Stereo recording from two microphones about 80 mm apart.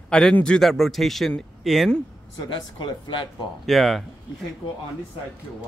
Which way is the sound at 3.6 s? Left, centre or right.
Centre.